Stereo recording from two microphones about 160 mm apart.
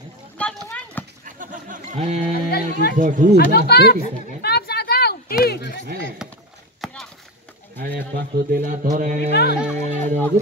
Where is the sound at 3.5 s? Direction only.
90° left.